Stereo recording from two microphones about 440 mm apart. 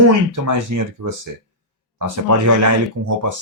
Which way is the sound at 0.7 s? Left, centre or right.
Right.